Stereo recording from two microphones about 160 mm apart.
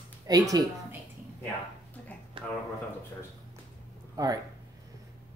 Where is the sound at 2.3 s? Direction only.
35° right (ahead or behind).